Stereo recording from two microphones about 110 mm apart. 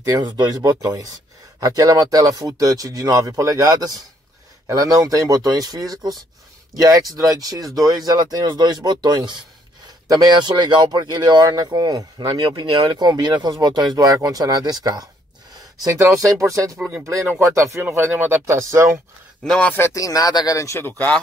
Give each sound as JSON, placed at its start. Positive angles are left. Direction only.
{"t": 0.0, "sound": "speech", "side_deg": -35}
{"t": 19.4, "sound": "a man's voice", "side_deg": 5}
{"t": 19.7, "sound": "speech", "side_deg": 25}